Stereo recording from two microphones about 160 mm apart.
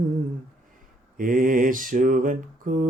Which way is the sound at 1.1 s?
60° right (ahead or behind).